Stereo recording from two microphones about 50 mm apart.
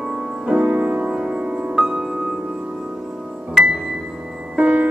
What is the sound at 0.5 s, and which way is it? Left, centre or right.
Music, right.